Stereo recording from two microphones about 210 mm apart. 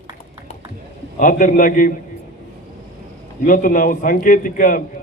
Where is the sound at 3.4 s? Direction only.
40° left (ahead or behind).